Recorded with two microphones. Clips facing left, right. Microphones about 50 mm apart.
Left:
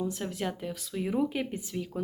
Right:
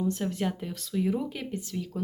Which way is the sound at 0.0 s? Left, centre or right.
Centre.